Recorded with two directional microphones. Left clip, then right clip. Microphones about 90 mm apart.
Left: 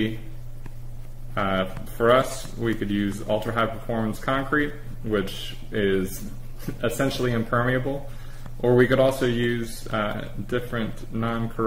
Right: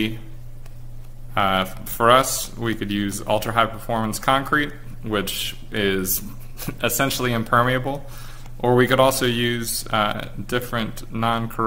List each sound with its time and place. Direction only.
1.3 s speech: 15° right (ahead or behind)